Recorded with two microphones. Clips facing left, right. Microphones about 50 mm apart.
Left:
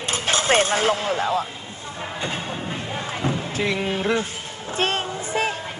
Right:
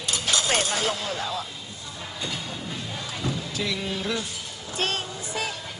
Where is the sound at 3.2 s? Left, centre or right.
Left.